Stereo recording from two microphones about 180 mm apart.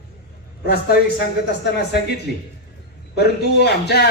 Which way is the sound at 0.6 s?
60° left (ahead or behind).